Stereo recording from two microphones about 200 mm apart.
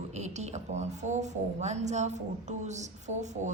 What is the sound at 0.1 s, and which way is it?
A woman's voice, 35° right (ahead or behind).